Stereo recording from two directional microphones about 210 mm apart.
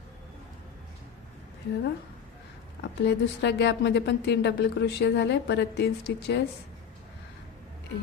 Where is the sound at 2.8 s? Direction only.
55° left (ahead or behind).